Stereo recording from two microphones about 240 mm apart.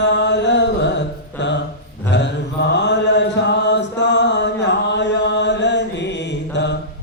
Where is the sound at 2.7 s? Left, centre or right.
Left.